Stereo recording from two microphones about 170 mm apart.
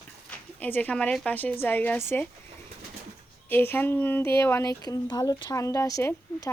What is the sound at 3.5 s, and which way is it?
Speech, 10° left (ahead or behind).